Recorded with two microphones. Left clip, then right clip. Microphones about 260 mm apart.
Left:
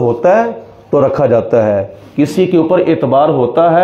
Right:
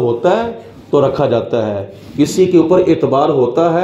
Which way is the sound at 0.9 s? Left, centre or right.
Left.